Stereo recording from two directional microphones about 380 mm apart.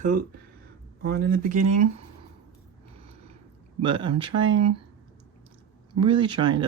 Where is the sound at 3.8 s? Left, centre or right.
Centre.